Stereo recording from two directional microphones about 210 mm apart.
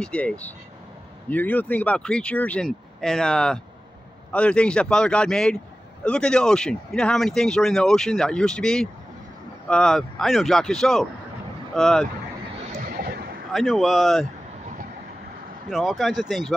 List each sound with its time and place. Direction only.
0.0 s speech: 5° left (ahead or behind)
12.7 s a sound: 45° right (ahead or behind)
13.5 s speech: centre (ahead or behind)
15.7 s speech: centre (ahead or behind)